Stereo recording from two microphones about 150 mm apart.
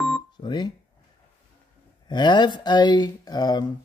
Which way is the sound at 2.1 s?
30° left (ahead or behind).